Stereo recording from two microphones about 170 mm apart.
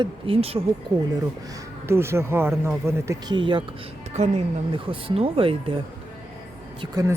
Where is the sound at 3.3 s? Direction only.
30° right (ahead or behind).